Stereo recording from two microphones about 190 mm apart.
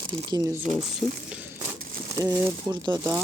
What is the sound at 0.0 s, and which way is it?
Speech, 25° right (ahead or behind).